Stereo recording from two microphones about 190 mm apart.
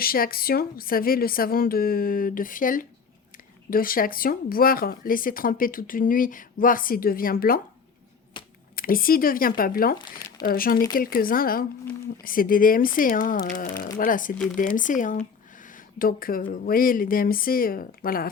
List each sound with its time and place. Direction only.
0.0 s speech: 50° left (ahead or behind)
8.4 s a sound: 25° left (ahead or behind)
8.7 s speech: 50° left (ahead or behind)